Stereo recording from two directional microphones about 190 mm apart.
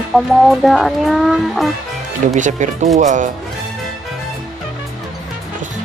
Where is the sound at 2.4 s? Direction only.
40° right (ahead or behind).